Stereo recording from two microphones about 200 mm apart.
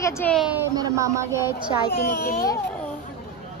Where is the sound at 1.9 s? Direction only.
45° left (ahead or behind).